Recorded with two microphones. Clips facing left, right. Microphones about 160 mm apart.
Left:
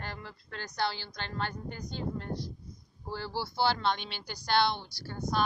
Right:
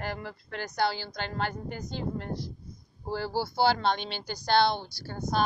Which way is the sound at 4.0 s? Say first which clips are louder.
Right 6 dB; 30° right (ahead or behind).